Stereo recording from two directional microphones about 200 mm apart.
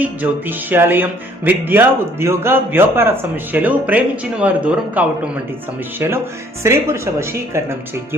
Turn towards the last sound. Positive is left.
turn(degrees=-15)  # may be behind; listen again after turning